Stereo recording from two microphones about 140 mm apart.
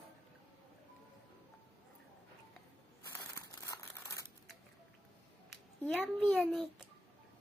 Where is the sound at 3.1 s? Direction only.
20° left (ahead or behind).